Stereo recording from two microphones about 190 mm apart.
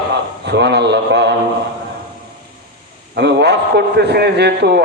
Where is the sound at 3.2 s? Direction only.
60° right (ahead or behind).